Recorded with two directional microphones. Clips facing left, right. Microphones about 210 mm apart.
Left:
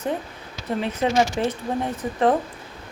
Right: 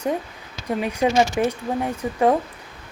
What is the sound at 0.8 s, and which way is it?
Speech, 10° right (ahead or behind).